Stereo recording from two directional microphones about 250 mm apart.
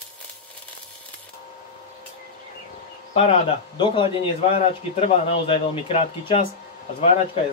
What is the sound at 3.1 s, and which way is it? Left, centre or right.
Speech, left.